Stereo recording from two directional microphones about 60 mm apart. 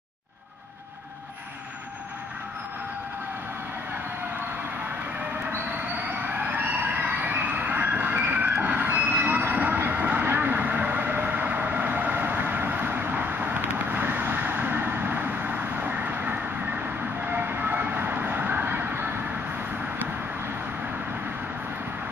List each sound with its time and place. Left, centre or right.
6.5 s vehicle: right
8.9 s train: right
9.8 s vehicle: right
17.3 s train: right